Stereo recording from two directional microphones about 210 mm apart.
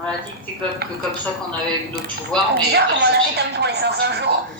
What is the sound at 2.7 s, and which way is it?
Speech, 50° right (ahead or behind).